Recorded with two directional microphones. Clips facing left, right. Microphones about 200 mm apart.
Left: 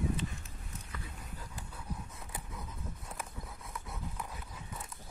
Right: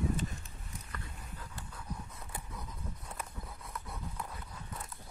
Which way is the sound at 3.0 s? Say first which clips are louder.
Even; centre (ahead or behind).